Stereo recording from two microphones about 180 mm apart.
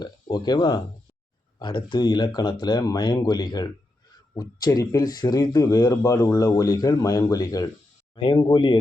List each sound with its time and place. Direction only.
0.0 s speech: 25° left (ahead or behind)